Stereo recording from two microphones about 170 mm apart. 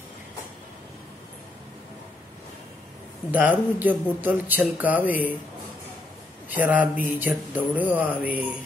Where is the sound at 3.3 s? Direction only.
10° right (ahead or behind).